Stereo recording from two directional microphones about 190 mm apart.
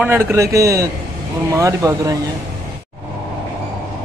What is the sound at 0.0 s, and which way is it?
A man's voice, 10° right (ahead or behind).